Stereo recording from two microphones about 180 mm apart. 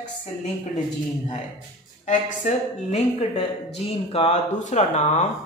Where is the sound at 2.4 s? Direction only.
40° left (ahead or behind).